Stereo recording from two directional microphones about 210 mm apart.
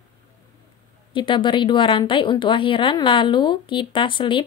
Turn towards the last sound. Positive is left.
turn(degrees=25)  # may be behind; listen again after turning